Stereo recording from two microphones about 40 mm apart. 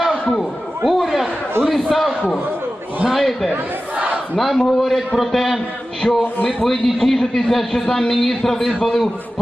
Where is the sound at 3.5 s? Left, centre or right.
Right.